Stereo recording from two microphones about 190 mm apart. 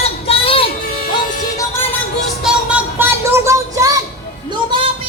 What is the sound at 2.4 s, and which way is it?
Music, 5° right (ahead or behind).